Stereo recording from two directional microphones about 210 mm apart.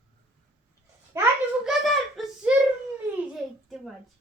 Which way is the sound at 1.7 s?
Centre (ahead or behind).